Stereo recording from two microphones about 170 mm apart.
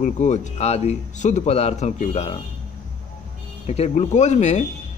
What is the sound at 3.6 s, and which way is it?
Speech, 40° left (ahead or behind).